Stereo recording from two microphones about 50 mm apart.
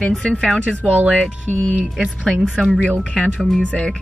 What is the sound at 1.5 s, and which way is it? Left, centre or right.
Speech, left.